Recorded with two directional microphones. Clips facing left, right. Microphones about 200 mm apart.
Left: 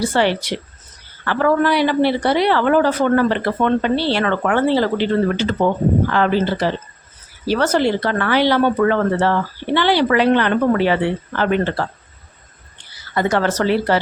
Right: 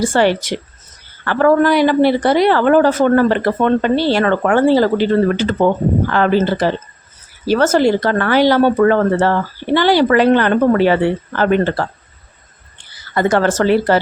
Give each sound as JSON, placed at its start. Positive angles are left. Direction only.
{"t": 0.0, "sound": "speech", "side_deg": -45}
{"t": 13.1, "sound": "speech", "side_deg": -50}